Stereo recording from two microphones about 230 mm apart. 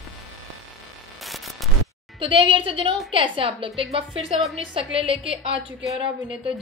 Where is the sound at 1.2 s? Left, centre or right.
Centre.